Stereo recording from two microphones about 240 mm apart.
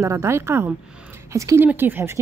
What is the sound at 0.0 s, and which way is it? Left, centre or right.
Speech, centre.